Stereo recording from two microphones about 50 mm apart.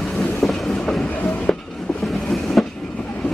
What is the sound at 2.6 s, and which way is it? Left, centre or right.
Train, centre.